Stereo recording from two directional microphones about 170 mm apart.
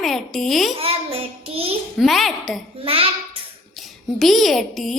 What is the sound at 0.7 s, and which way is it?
Child singing, 35° right (ahead or behind).